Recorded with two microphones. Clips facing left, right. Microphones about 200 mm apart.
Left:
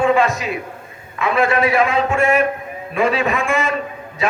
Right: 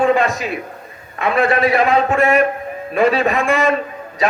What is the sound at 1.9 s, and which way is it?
A man's voice, 35° right (ahead or behind).